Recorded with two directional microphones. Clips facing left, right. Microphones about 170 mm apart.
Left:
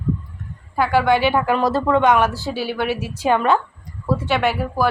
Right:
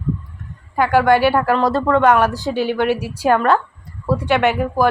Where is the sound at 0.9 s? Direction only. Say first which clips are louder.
Right 3 dB; 10° right (ahead or behind).